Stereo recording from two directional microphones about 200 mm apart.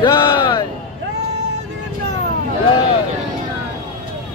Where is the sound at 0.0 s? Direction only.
25° left (ahead or behind).